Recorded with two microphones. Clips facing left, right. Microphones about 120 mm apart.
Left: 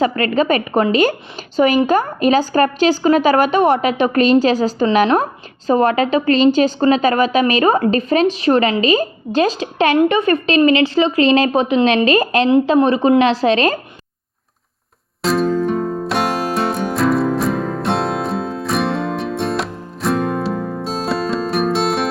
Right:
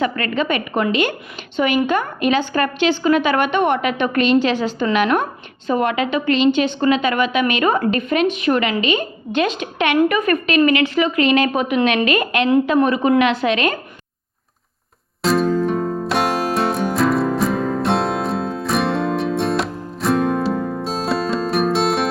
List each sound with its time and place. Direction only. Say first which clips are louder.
0.0 s a woman's voice: left 4 dB; 35° left (ahead or behind)
15.2 s music: even; centre (ahead or behind)